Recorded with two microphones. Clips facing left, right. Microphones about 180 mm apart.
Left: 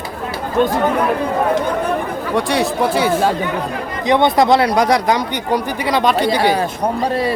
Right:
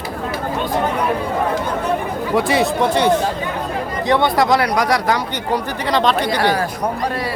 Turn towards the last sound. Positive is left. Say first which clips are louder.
# left 1 dB
turn(degrees=10)  # may be behind; listen again after turning